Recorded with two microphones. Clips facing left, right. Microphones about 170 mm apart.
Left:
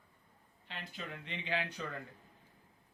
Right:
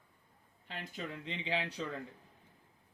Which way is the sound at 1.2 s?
30° right (ahead or behind).